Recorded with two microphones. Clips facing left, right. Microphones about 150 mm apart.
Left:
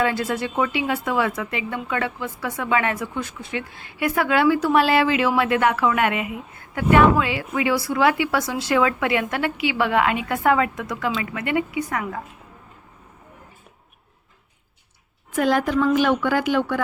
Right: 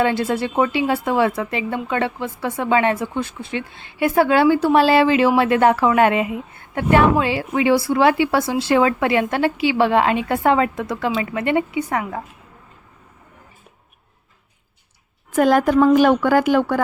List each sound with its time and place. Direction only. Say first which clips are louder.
0.0 s a woman's voice: right 3 dB; 30° right (ahead or behind)
15.4 s a woman's voice: right 5 dB; 45° right (ahead or behind)